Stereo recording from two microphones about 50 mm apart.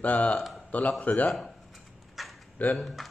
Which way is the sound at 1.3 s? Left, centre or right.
Centre.